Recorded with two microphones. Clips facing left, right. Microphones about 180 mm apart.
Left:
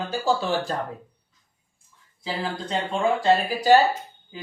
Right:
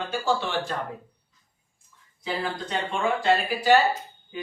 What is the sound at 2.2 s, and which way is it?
Speech, 30° left (ahead or behind).